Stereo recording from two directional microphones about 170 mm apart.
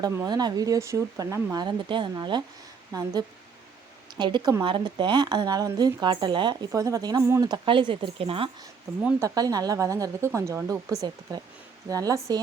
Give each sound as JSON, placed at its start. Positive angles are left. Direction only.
{"t": 0.0, "sound": "speech", "side_deg": -25}
{"t": 9.2, "sound": "speech", "side_deg": -20}